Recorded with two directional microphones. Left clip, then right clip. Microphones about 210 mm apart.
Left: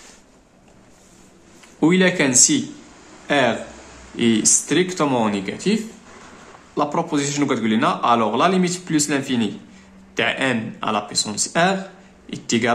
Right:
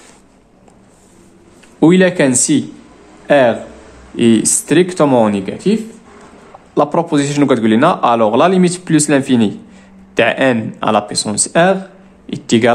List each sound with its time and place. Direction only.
1.8 s a man's voice: 35° right (ahead or behind)